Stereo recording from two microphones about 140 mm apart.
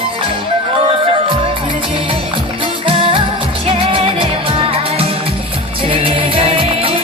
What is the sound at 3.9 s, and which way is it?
Music, 40° right (ahead or behind).